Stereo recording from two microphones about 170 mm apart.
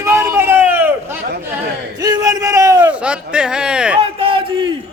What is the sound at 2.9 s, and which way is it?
Speech, 5° right (ahead or behind).